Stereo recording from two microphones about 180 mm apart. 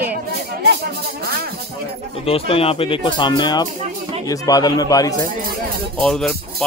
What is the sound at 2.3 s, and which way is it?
Speech, 30° left (ahead or behind).